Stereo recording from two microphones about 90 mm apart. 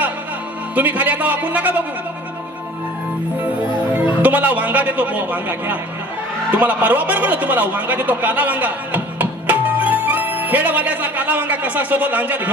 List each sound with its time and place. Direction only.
0.8 s speech: 20° right (ahead or behind)
3.9 s a man's voice: 20° right (ahead or behind)